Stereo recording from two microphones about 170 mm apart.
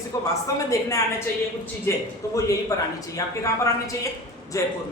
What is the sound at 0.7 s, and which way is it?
A woman's voice, 20° left (ahead or behind).